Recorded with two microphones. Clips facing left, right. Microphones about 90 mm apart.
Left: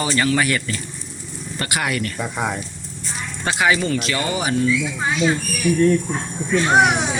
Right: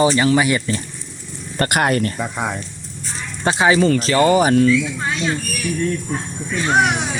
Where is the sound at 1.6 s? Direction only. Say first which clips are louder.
Right 6 dB; 50° right (ahead or behind).